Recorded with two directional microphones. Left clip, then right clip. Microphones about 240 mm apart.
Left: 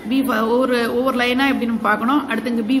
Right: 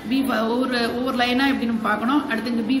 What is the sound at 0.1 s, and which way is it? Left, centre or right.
A man's voice, left.